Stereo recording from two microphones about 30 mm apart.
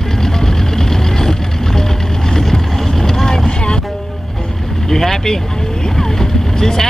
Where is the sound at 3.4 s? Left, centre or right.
Left.